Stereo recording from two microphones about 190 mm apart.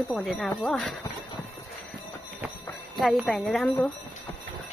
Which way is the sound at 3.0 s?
Centre (ahead or behind).